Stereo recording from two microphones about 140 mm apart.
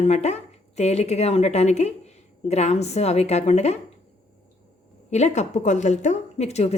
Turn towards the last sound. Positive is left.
turn(degrees=50)  # may be behind; listen again after turning